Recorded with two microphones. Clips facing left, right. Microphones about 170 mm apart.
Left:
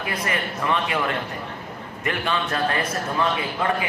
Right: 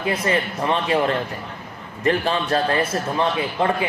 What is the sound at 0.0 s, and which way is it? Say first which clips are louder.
A man's voice: right 5 dB; 30° right (ahead or behind).